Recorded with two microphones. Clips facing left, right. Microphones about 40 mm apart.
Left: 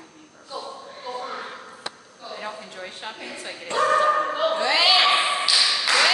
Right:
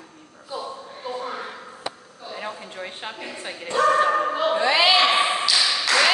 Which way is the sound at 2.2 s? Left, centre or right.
Right.